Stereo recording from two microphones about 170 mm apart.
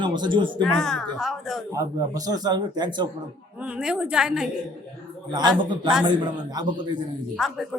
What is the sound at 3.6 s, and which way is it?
Speech, 5° right (ahead or behind).